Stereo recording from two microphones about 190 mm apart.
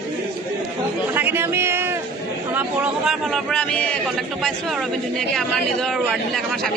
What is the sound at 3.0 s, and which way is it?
Speech, centre (ahead or behind).